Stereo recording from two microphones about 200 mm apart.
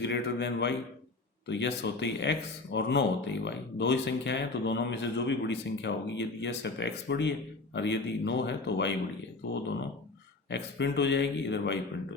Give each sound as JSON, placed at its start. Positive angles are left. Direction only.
{"t": 0.0, "sound": "speech", "side_deg": 60}
{"t": 10.5, "sound": "speech", "side_deg": 60}